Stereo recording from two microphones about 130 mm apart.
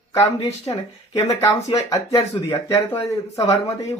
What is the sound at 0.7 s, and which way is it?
Speech, 35° left (ahead or behind).